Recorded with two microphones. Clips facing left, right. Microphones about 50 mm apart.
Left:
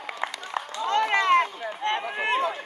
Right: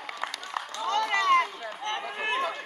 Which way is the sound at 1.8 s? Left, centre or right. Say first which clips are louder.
Left 5 dB; left.